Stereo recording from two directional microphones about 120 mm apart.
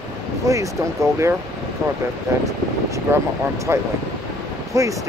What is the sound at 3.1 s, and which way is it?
Speech, 20° right (ahead or behind).